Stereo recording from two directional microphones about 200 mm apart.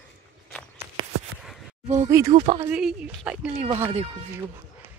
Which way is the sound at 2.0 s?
15° right (ahead or behind).